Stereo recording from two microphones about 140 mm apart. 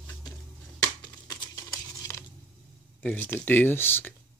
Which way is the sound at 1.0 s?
30° left (ahead or behind).